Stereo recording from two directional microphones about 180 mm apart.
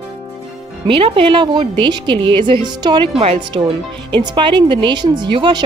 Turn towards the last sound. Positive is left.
turn(degrees=-25)  # may be behind; listen again after turning